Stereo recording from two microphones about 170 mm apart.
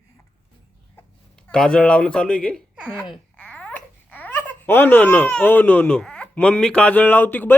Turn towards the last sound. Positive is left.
turn(degrees=10)  # may be behind; listen again after turning